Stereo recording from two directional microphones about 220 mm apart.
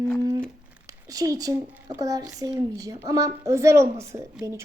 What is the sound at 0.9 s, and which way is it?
A woman's voice, 15° right (ahead or behind).